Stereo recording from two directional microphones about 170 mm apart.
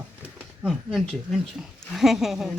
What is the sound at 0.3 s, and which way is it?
Speech, 5° right (ahead or behind).